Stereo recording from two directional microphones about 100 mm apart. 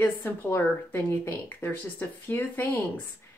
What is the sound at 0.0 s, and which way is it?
Speech, 20° left (ahead or behind).